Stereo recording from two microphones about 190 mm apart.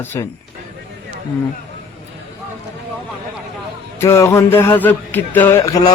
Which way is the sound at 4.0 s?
15° left (ahead or behind).